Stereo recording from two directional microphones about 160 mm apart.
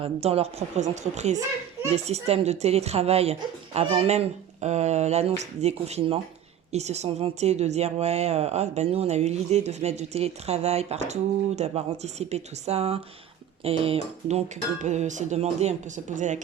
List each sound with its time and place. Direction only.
0.0 s a woman's voice: 40° right (ahead or behind)